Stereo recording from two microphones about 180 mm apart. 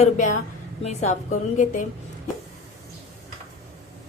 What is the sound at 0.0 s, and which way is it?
Speech, 45° left (ahead or behind).